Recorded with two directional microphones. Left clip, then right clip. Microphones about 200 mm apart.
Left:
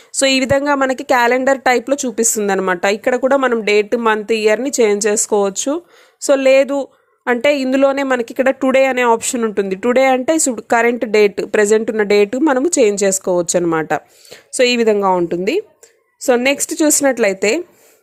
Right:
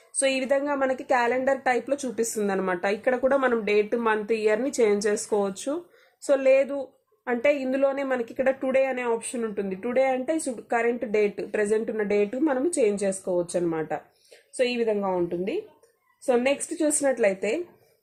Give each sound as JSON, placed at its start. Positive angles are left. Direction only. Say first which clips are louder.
{"t": 0.2, "sound": "a woman's voice", "louder": "left 10 dB", "side_deg": 35}